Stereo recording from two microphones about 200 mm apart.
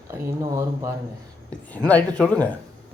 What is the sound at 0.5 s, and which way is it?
Speech, 15° right (ahead or behind).